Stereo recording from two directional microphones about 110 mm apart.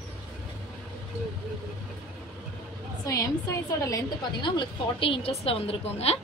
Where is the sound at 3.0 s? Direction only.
30° left (ahead or behind).